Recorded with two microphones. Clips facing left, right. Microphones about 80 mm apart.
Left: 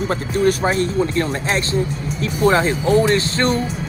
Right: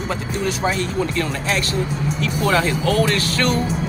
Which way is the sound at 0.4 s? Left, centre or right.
Left.